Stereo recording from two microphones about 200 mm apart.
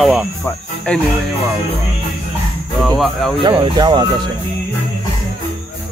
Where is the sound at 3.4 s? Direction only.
20° right (ahead or behind).